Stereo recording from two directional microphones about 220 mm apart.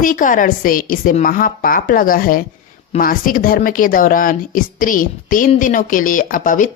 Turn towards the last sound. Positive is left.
turn(degrees=35)  # may be behind; listen again after turning